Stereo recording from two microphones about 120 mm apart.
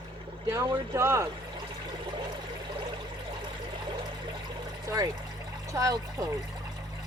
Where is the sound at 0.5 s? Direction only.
20° right (ahead or behind).